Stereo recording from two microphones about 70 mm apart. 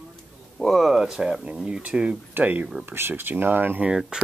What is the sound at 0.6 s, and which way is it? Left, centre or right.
Speech, centre.